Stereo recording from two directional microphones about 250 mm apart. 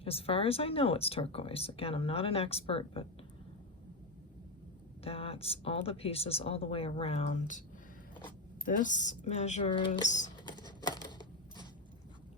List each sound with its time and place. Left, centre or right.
0.0 s speech: left
5.0 s speech: left
8.6 s speech: left
10.7 s a sound: centre